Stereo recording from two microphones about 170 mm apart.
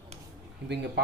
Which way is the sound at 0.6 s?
80° right.